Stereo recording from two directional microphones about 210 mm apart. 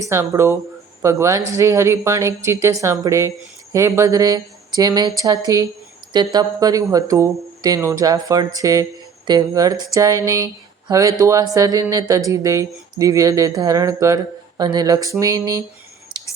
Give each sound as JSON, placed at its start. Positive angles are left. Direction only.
{"t": 0.0, "sound": "speech", "side_deg": -15}